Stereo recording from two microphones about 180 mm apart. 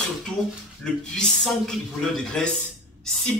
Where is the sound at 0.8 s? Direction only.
5° left (ahead or behind).